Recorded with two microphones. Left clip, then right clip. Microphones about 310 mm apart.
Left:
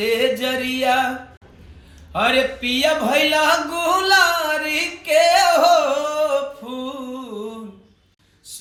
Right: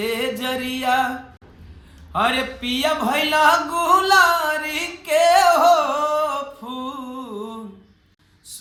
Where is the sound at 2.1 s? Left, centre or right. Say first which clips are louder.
Left 3 dB; centre.